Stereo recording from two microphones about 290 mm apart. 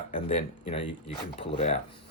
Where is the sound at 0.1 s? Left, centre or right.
Centre.